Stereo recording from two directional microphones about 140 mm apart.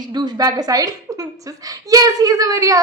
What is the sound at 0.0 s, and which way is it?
A woman's voice, 30° right (ahead or behind).